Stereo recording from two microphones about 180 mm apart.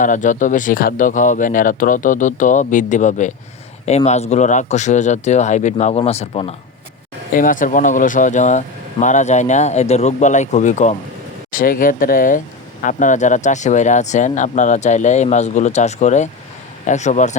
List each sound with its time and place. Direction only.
0.0 s speech: 45° left (ahead or behind)
7.3 s speech: 50° left (ahead or behind)